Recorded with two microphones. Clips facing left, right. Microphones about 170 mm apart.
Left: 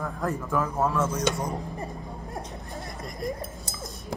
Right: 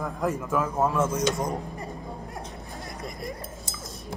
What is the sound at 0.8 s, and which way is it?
Speech, 15° right (ahead or behind).